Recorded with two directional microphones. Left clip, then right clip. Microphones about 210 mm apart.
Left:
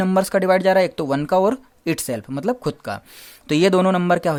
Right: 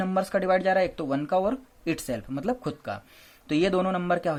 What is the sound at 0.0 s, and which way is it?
Speech, 40° left (ahead or behind).